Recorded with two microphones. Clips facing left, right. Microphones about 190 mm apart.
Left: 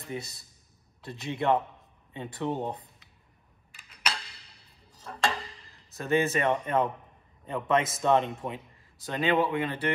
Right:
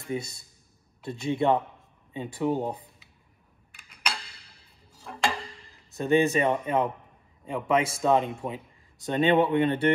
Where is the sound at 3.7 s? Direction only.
Centre (ahead or behind).